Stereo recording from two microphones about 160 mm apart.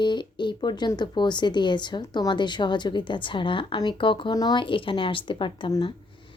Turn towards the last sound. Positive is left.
turn(degrees=30)  # may be behind; listen again after turning